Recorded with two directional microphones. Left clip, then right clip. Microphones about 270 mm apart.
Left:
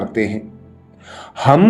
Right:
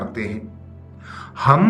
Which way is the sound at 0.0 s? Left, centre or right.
Centre.